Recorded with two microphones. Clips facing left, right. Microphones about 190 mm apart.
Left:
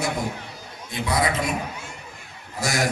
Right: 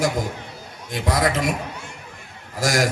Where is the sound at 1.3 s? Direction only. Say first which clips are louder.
Right 3 dB; 90° right.